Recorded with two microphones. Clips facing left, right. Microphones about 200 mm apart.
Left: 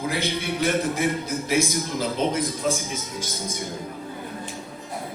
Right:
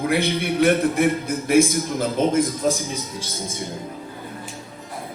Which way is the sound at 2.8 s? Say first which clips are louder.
Right 2 dB; 30° right (ahead or behind).